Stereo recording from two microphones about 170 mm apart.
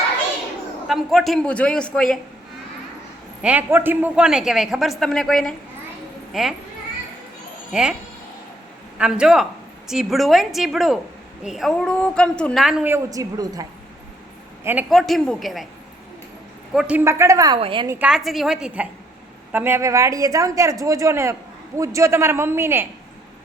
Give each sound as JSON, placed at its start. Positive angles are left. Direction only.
{"t": 0.9, "sound": "a woman's voice", "side_deg": 0}
{"t": 3.4, "sound": "a woman's voice", "side_deg": -10}
{"t": 7.7, "sound": "a woman's voice", "side_deg": -5}
{"t": 9.0, "sound": "a woman's voice", "side_deg": -5}
{"t": 13.1, "sound": "a woman's voice", "side_deg": -20}
{"t": 14.8, "sound": "a woman's voice", "side_deg": 0}
{"t": 16.7, "sound": "a woman's voice", "side_deg": -10}
{"t": 18.0, "sound": "a woman's voice", "side_deg": 0}